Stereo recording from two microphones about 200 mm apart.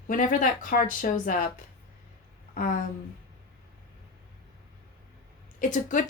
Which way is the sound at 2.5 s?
45° left (ahead or behind).